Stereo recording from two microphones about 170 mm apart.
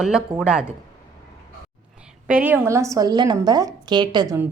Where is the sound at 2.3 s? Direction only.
10° right (ahead or behind).